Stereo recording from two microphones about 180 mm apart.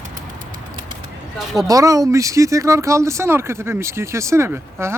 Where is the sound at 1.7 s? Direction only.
20° right (ahead or behind).